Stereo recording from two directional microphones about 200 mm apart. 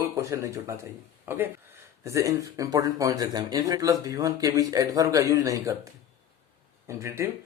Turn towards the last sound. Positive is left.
turn(degrees=-15)  # may be behind; listen again after turning